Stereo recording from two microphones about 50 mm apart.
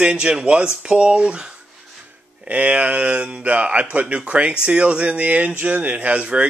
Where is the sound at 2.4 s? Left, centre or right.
Right.